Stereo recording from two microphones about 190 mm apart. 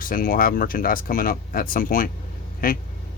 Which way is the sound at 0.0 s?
45° left (ahead or behind).